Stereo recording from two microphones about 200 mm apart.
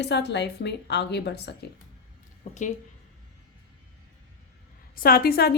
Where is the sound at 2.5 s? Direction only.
35° left (ahead or behind).